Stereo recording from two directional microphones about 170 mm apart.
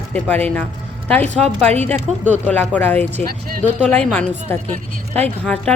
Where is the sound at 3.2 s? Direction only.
60° right (ahead or behind).